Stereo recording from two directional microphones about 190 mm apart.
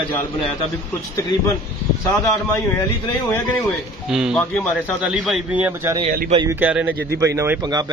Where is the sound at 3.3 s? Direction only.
Centre (ahead or behind).